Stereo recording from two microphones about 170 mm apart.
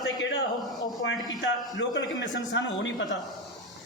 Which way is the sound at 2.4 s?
90° left.